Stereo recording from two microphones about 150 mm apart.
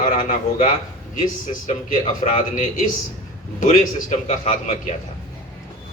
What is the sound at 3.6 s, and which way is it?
A man's voice, 60° left (ahead or behind).